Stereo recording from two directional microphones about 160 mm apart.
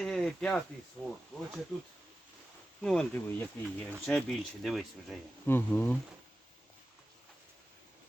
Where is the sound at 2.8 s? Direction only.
5° left (ahead or behind).